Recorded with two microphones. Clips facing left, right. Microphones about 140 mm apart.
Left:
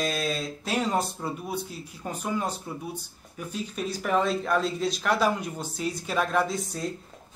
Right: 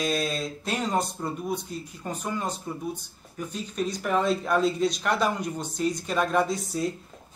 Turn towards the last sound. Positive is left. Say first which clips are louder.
# right 2 dB
turn(degrees=0)  # may be behind; listen again after turning